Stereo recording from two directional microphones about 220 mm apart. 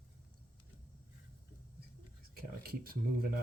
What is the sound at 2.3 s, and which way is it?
Speech, 40° right (ahead or behind).